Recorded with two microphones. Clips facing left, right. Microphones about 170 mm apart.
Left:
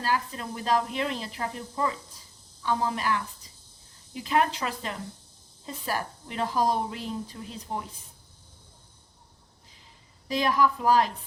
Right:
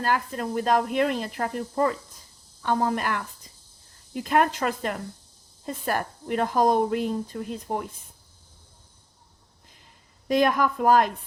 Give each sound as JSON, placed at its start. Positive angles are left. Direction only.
{"t": 0.0, "sound": "a woman's voice", "side_deg": -50}
{"t": 10.2, "sound": "speech", "side_deg": -50}